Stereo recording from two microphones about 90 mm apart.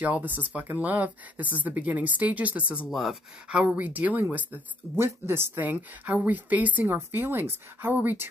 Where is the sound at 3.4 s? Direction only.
15° right (ahead or behind).